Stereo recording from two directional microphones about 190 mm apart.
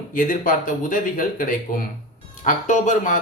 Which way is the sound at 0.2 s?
45° left (ahead or behind).